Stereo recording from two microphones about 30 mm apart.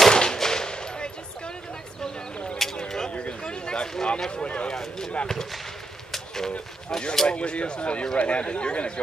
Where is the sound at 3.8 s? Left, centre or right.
Centre.